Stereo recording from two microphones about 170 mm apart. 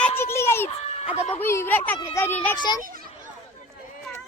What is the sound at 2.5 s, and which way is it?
Speech, 25° left (ahead or behind).